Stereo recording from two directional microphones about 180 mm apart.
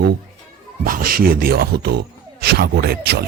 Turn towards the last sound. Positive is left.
turn(degrees=-60)  # may be behind; listen again after turning